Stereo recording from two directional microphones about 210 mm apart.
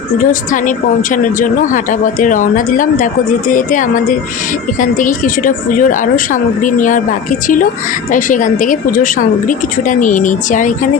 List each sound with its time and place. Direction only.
0.2 s a woman's voice: 40° left (ahead or behind)